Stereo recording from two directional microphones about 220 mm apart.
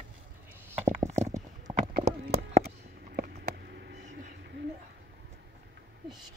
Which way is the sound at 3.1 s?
45° right (ahead or behind).